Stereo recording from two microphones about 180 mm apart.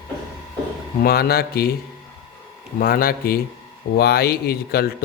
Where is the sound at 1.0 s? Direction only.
60° left (ahead or behind).